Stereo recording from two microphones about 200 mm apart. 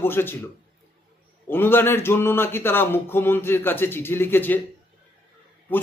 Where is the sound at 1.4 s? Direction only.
10° left (ahead or behind).